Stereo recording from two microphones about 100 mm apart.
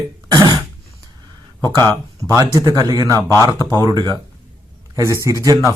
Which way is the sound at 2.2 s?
35° right (ahead or behind).